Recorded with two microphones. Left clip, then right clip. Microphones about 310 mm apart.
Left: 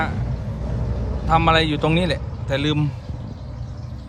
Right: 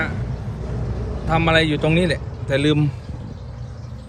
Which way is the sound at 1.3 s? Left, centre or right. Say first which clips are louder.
Left 1 dB; centre.